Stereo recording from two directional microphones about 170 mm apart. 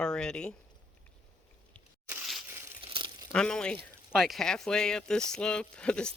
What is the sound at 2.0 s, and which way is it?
Crushing, centre (ahead or behind).